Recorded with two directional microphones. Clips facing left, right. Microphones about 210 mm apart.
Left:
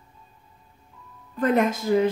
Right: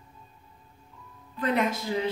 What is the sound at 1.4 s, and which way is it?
Speech, 45° left (ahead or behind).